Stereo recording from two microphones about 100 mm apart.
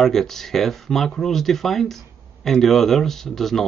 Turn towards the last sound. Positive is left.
turn(degrees=5)  # may be behind; listen again after turning